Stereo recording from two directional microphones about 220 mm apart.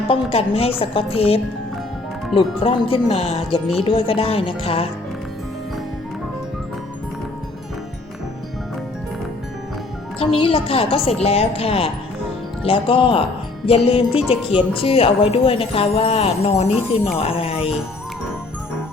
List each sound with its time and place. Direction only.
0.1 s speech: 25° left (ahead or behind)
10.2 s speech: 25° left (ahead or behind)